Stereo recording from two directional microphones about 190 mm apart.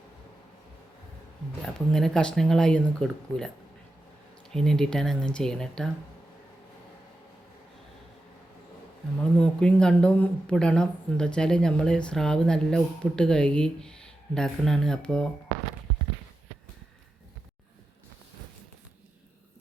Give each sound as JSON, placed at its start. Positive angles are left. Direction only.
{"t": 1.9, "sound": "speech", "side_deg": 5}
{"t": 4.5, "sound": "speech", "side_deg": 5}
{"t": 9.4, "sound": "speech", "side_deg": 5}